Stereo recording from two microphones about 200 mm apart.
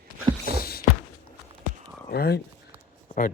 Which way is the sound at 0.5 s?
50° left (ahead or behind).